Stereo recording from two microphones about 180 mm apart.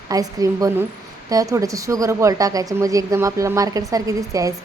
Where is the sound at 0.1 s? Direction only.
20° right (ahead or behind).